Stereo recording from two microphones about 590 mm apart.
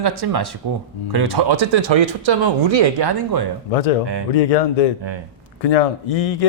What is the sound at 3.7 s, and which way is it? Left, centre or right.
A man's voice, left.